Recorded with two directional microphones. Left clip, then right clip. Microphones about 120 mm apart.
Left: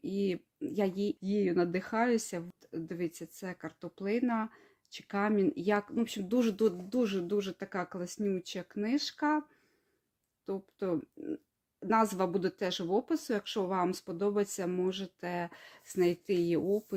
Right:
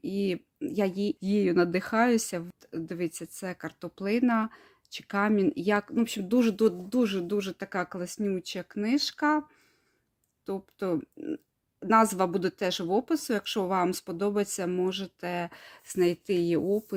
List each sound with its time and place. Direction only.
0.0 s speech: 30° right (ahead or behind)
1.2 s speech: 50° right (ahead or behind)
10.4 s speech: 35° right (ahead or behind)